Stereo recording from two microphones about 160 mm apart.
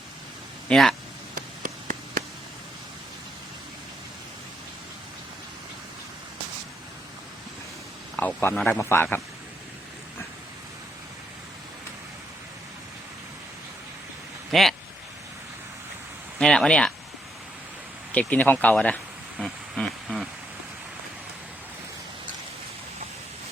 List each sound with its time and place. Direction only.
0.7 s speech: centre (ahead or behind)
1.4 s a sound: 55° right (ahead or behind)
8.1 s a man's voice: 10° left (ahead or behind)
14.5 s speech: centre (ahead or behind)
16.4 s speech: 5° left (ahead or behind)
18.1 s speech: 10° left (ahead or behind)
19.4 s a sound: centre (ahead or behind)